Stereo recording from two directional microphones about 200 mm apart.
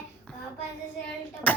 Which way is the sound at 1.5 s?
10° left (ahead or behind).